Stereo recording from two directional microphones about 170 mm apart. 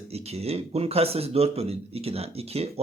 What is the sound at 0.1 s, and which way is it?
A man's voice, 40° right (ahead or behind).